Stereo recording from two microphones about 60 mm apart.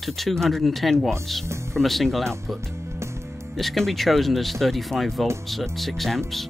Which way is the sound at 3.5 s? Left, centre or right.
Centre.